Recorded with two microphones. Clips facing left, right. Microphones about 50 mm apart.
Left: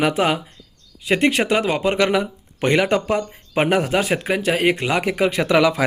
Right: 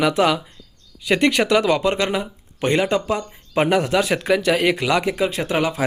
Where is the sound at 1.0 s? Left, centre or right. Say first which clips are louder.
Even; centre.